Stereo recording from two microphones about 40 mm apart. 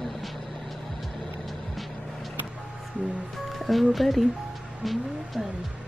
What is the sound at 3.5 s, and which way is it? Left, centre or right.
Music, centre.